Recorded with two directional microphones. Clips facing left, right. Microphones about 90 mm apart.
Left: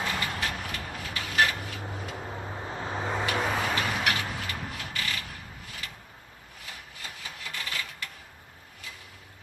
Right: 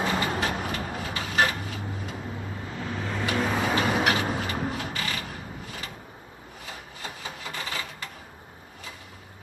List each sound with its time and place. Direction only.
0.0 s vehicle: 30° right (ahead or behind)
2.2 s vehicle: 25° left (ahead or behind)
3.3 s vehicle: 10° left (ahead or behind)
3.8 s vehicle: 25° right (ahead or behind)
6.7 s rub: 30° right (ahead or behind)